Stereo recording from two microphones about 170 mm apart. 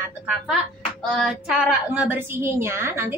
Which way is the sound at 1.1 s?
Centre (ahead or behind).